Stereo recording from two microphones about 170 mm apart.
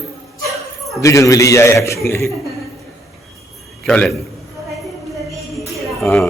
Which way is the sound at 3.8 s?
5° left (ahead or behind).